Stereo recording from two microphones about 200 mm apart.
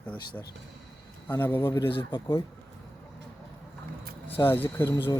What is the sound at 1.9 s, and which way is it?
Speech, 25° left (ahead or behind).